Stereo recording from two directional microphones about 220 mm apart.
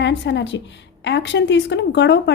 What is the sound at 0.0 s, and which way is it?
A woman's voice, 55° left (ahead or behind).